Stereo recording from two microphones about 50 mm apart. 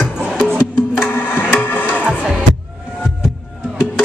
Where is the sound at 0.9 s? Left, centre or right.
Left.